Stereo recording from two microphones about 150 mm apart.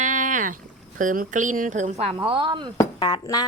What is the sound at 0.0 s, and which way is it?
Speech, 55° right (ahead or behind).